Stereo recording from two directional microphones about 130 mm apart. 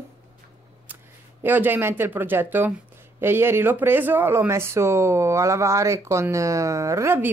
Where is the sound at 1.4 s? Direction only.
15° right (ahead or behind).